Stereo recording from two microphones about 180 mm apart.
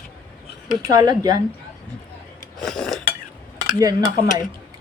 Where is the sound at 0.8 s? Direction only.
20° right (ahead or behind).